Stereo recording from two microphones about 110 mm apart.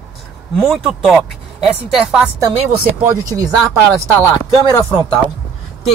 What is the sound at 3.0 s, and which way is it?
Speech, 30° right (ahead or behind).